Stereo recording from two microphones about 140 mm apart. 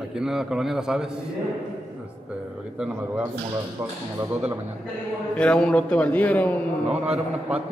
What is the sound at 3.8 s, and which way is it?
Speech, 15° right (ahead or behind).